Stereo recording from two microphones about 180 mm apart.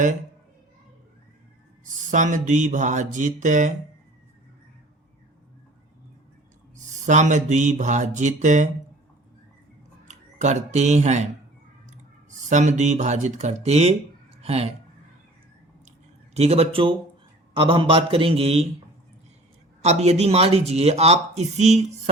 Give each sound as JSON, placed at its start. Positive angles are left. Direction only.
{"t": 1.8, "sound": "a sound", "side_deg": -45}
{"t": 6.7, "sound": "speech", "side_deg": -40}
{"t": 10.1, "sound": "speech", "side_deg": -40}
{"t": 12.5, "sound": "speech", "side_deg": -40}
{"t": 16.3, "sound": "speech", "side_deg": -35}
{"t": 19.8, "sound": "speech", "side_deg": -40}